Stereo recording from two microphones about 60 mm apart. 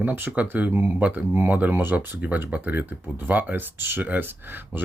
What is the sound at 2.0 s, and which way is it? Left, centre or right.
Speech, right.